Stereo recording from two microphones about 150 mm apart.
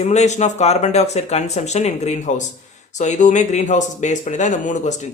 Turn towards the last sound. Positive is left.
turn(degrees=55)  # may be behind; listen again after turning